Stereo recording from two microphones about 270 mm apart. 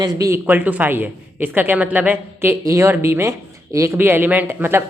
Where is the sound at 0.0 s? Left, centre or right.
Centre.